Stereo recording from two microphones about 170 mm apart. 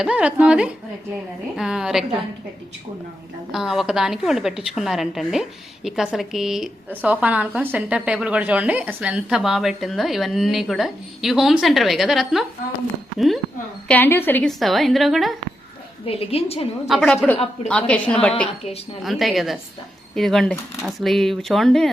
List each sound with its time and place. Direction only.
0.0 s a woman's voice: 5° right (ahead or behind)
3.5 s a woman's voice: centre (ahead or behind)
13.8 s a woman's voice: 10° left (ahead or behind)
14.6 s a woman's voice: centre (ahead or behind)
16.0 s a woman's voice: 35° left (ahead or behind)
16.8 s a woman's voice: centre (ahead or behind)
17.3 s a woman's voice: 35° left (ahead or behind)
17.7 s a woman's voice: 5° left (ahead or behind)